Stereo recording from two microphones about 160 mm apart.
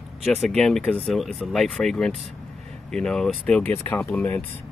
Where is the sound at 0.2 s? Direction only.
Centre (ahead or behind).